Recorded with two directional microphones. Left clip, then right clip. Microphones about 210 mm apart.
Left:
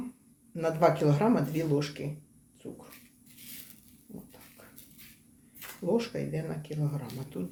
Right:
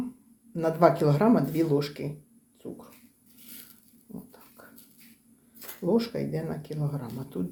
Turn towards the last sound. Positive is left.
turn(degrees=-20)  # may be behind; listen again after turning